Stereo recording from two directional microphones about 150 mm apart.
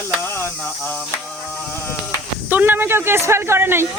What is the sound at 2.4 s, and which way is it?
Speech, 15° right (ahead or behind).